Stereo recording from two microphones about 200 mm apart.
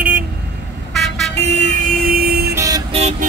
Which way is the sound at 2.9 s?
30° right (ahead or behind).